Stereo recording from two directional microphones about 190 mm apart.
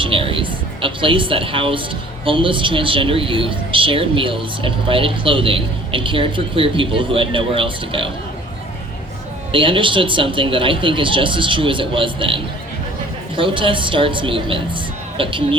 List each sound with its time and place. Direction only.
0.0 s a sound: 30° right (ahead or behind)
2.2 s a woman's voice: 25° right (ahead or behind)
9.5 s a woman's voice: 25° right (ahead or behind)